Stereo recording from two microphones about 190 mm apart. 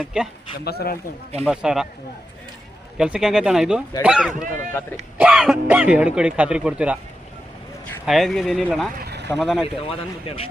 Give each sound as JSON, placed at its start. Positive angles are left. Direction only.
{"t": 0.0, "sound": "speech", "side_deg": -5}
{"t": 0.6, "sound": "speech", "side_deg": 55}
{"t": 1.5, "sound": "speech", "side_deg": -5}
{"t": 3.0, "sound": "speech", "side_deg": -5}
{"t": 4.5, "sound": "speech", "side_deg": 10}
{"t": 5.1, "sound": "speech", "side_deg": -5}
{"t": 8.0, "sound": "speech", "side_deg": 0}
{"t": 9.0, "sound": "vehicle", "side_deg": -60}
{"t": 9.3, "sound": "speech", "side_deg": 0}
{"t": 10.2, "sound": "speech", "side_deg": 30}